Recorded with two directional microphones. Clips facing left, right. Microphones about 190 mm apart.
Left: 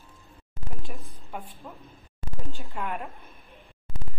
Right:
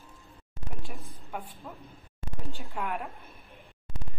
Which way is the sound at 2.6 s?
Centre (ahead or behind).